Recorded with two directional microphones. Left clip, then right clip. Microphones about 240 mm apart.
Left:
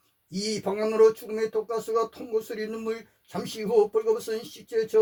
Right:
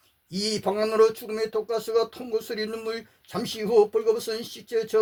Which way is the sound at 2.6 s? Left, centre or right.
Right.